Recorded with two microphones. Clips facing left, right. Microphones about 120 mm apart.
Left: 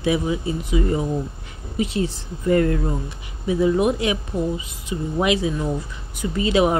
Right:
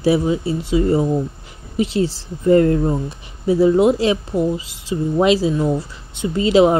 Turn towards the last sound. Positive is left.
turn(degrees=-25)  # may be behind; listen again after turning